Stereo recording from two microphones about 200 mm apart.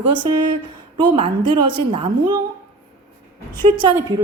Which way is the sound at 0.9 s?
25° right (ahead or behind).